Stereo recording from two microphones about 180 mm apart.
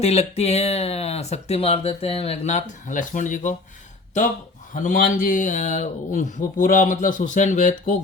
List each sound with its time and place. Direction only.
0.0 s speech: 35° left (ahead or behind)